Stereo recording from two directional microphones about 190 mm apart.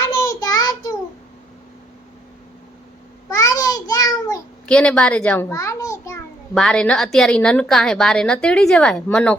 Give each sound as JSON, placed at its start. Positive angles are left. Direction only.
{"t": 0.0, "sound": "child singing", "side_deg": 15}
{"t": 3.2, "sound": "a sound", "side_deg": 15}
{"t": 4.6, "sound": "a child's voice", "side_deg": 5}
{"t": 6.5, "sound": "a woman's voice", "side_deg": 5}